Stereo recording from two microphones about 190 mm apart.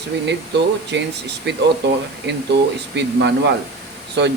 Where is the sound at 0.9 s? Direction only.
65° right (ahead or behind).